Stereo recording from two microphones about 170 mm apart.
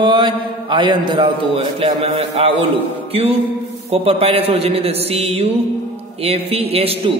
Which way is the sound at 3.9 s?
35° right (ahead or behind).